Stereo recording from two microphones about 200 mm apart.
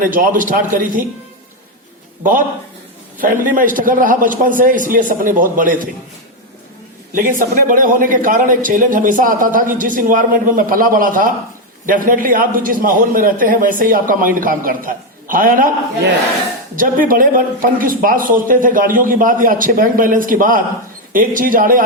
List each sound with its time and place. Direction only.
0.0 s a man's voice: 40° right (ahead or behind)
3.2 s a man's voice: 45° right (ahead or behind)
7.1 s a man's voice: 45° right (ahead or behind)
16.7 s a man's voice: 45° right (ahead or behind)